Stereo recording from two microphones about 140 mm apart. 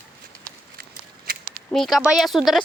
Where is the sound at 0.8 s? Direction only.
90° right.